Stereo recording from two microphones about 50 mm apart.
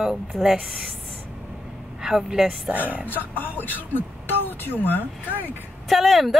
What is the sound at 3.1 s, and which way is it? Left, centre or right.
Speech, left.